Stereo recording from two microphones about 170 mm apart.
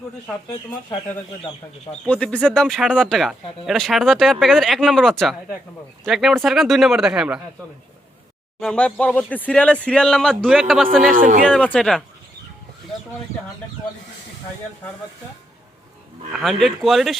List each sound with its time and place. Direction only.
2.0 s speech: 5° left (ahead or behind)
8.6 s speech: 5° left (ahead or behind)
11.1 s speech: 55° right (ahead or behind)
11.4 s speech: 5° left (ahead or behind)
16.3 s speech: centre (ahead or behind)